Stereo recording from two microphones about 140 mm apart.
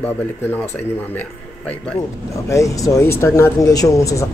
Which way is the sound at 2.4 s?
25° left (ahead or behind).